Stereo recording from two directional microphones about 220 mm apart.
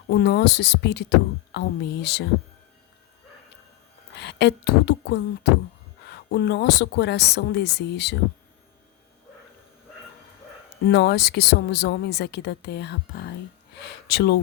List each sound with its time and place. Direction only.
0.1 s speech: 50° left (ahead or behind)
4.1 s speech: 50° left (ahead or behind)
10.8 s speech: 50° left (ahead or behind)